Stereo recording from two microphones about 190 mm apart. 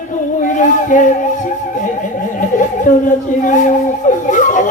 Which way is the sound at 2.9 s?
40° left (ahead or behind).